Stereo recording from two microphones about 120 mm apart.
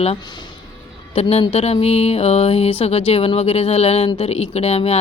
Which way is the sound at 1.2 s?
60° left (ahead or behind).